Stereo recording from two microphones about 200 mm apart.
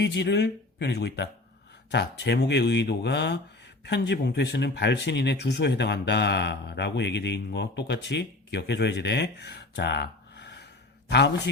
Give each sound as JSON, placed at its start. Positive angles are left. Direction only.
{"t": 0.0, "sound": "speech", "side_deg": 60}